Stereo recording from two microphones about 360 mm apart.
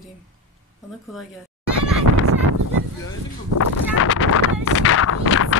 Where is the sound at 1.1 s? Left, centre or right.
Centre.